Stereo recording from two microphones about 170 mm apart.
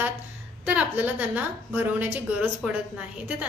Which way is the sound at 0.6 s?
5° right (ahead or behind).